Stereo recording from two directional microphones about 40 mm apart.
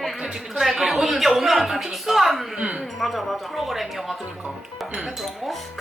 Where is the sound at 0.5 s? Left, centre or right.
Centre.